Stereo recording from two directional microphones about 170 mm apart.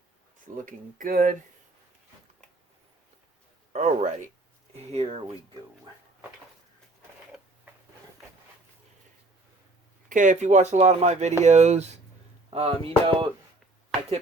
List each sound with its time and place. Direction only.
0.5 s speech: 50° right (ahead or behind)
3.7 s speech: 40° right (ahead or behind)
10.1 s speech: 50° right (ahead or behind); by 13.3 s 35° right (ahead or behind)